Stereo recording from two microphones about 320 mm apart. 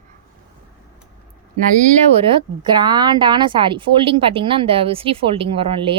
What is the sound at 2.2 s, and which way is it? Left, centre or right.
A woman's voice, centre.